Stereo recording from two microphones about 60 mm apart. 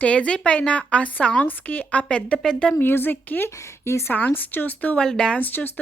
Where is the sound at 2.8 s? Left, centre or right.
Left.